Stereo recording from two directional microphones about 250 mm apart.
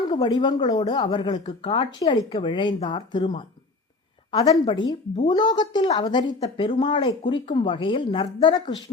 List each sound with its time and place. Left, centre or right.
0.1 s speech: centre